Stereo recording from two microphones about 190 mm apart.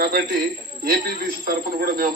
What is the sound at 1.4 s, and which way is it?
Speech, 50° right (ahead or behind).